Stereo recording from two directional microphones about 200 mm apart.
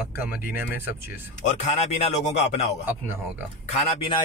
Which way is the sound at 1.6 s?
35° left (ahead or behind).